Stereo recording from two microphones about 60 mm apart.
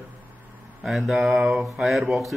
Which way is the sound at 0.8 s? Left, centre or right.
Centre.